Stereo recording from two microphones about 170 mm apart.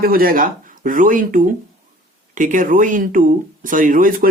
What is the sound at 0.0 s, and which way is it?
Speech, 60° right (ahead or behind).